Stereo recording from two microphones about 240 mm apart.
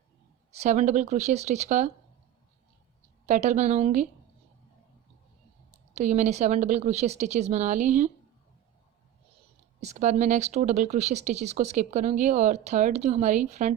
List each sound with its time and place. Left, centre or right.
0.5 s speech: right
3.2 s speech: right
5.9 s speech: right
9.8 s speech: right